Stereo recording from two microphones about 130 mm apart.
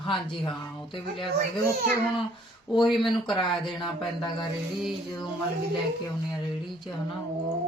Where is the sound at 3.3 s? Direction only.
35° left (ahead or behind).